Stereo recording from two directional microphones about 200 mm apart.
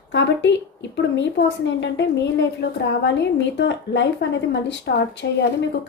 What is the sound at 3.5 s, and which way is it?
A woman's voice, 60° left (ahead or behind).